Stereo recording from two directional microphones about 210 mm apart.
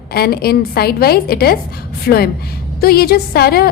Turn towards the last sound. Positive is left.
turn(degrees=45)  # may be behind; listen again after turning